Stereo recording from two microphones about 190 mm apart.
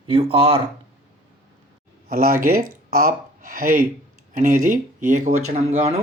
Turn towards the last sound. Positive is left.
turn(degrees=-35)  # may be behind; listen again after turning